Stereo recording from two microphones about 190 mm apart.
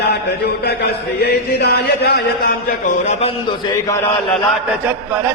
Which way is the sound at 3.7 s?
15° left (ahead or behind).